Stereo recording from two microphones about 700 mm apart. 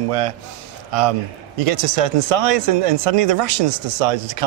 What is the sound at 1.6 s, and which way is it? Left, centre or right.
A man's voice, right.